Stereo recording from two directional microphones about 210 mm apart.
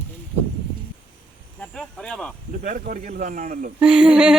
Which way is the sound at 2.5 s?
40° right (ahead or behind).